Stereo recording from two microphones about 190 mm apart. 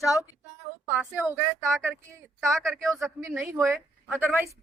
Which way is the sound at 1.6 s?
10° right (ahead or behind).